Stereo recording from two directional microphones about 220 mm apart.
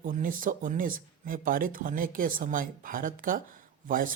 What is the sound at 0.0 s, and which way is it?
Speech, 40° right (ahead or behind).